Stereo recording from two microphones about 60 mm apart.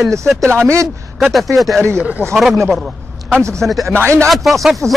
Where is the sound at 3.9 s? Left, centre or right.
Right.